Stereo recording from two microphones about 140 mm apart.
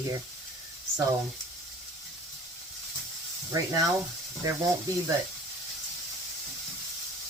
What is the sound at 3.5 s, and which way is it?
Speech, 25° right (ahead or behind).